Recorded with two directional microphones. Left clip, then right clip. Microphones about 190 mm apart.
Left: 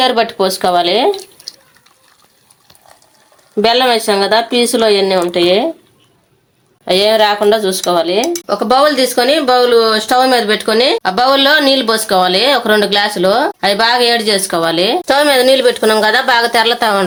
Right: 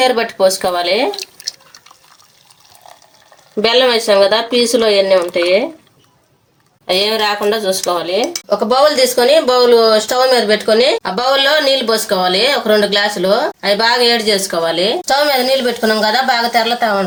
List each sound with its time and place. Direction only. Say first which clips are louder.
0.0 s speech: even; 25° left (ahead or behind)
3.6 s speech: left 1 dB; 20° left (ahead or behind)
6.8 s speech: left 4 dB; 30° left (ahead or behind)
8.4 s speech: even; 45° left (ahead or behind)